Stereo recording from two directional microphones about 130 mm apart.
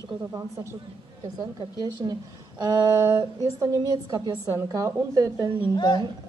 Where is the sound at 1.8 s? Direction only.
30° right (ahead or behind).